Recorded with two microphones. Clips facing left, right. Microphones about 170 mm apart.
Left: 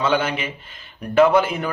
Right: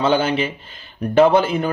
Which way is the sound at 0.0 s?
30° right (ahead or behind).